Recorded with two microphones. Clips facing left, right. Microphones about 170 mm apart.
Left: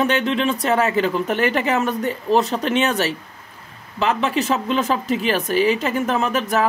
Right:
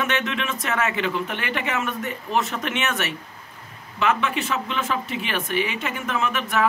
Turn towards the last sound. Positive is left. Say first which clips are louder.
# left 4 dB
turn(degrees=40)  # may be behind; listen again after turning